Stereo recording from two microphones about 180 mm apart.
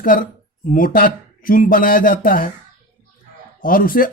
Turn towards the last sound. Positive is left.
turn(degrees=50)  # may be behind; listen again after turning